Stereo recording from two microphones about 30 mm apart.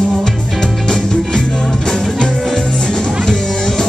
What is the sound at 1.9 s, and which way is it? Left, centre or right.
Music, centre.